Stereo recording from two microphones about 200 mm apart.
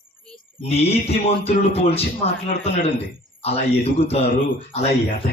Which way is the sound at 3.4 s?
30° left (ahead or behind).